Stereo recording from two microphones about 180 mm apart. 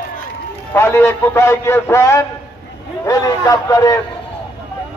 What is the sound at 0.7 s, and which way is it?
A man's voice, 15° left (ahead or behind).